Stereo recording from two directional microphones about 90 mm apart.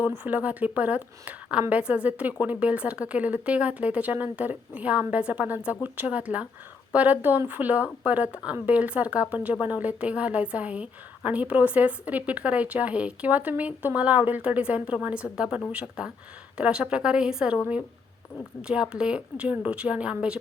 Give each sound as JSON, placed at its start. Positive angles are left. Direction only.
{"t": 0.2, "sound": "a woman's voice", "side_deg": -15}
{"t": 18.6, "sound": "a woman's voice", "side_deg": -10}